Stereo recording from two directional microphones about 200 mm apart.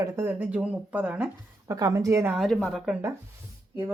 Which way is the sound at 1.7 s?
20° right (ahead or behind).